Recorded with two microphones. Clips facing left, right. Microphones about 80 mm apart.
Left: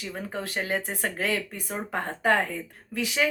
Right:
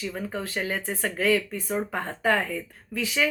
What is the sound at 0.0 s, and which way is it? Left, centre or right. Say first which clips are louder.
Speech: right 2 dB; left.